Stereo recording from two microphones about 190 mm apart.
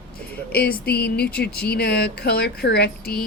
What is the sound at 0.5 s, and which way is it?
Speech, 55° left (ahead or behind).